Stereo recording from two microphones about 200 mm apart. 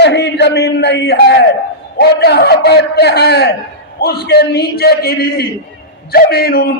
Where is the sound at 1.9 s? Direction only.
55° left (ahead or behind).